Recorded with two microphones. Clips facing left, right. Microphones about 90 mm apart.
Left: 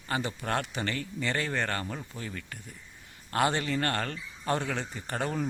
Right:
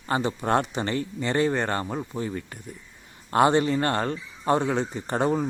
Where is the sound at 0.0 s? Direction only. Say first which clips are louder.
Right 7 dB; 30° right (ahead or behind).